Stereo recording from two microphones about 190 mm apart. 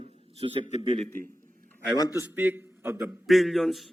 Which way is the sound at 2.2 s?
10° right (ahead or behind).